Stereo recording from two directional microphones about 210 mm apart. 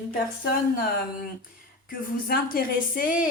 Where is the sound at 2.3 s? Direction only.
45° left (ahead or behind).